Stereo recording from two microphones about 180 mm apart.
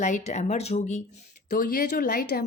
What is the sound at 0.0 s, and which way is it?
Speech, 40° left (ahead or behind).